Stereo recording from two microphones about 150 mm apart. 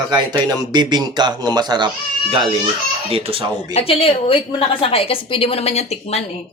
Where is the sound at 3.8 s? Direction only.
40° left (ahead or behind).